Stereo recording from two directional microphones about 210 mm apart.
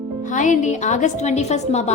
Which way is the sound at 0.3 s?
35° left (ahead or behind).